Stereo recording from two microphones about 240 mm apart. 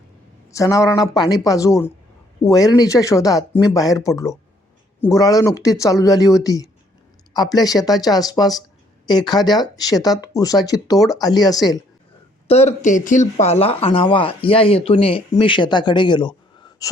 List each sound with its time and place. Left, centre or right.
0.5 s speech: centre
12.5 s speech: left